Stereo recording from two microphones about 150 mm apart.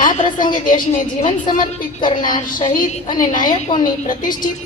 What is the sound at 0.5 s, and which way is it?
Speech, 65° left (ahead or behind).